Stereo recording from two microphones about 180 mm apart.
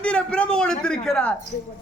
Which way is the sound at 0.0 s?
5° left (ahead or behind).